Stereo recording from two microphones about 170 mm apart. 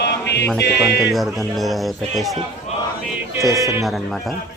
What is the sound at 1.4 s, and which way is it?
Speech, centre (ahead or behind).